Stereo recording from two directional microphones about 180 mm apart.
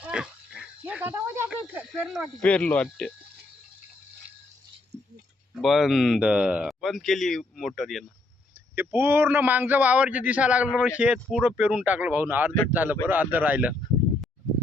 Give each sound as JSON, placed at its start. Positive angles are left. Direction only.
{"t": 0.0, "sound": "dog", "side_deg": -5}
{"t": 1.5, "sound": "speech", "side_deg": -5}
{"t": 5.5, "sound": "speech", "side_deg": 0}
{"t": 8.7, "sound": "a man's voice", "side_deg": -10}